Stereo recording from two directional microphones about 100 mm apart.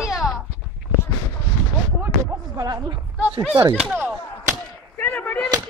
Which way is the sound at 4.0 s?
20° right (ahead or behind).